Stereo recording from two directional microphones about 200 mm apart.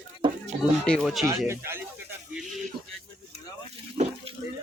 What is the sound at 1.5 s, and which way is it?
Speech, 10° right (ahead or behind).